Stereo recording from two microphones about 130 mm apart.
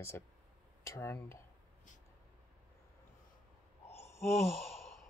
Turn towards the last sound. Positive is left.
turn(degrees=0)  # may be behind; listen again after turning